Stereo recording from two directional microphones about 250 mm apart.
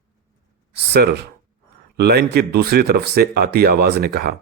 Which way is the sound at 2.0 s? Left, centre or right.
Right.